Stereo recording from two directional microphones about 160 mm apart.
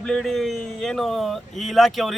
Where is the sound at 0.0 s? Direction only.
5° left (ahead or behind).